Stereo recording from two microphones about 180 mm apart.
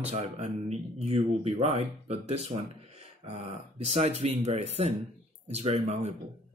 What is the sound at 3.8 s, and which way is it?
Speech, 35° right (ahead or behind).